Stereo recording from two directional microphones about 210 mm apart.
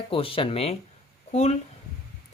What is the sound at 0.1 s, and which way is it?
Speech, 25° left (ahead or behind).